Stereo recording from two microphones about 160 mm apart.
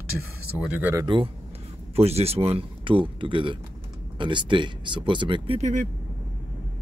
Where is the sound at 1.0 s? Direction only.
30° right (ahead or behind).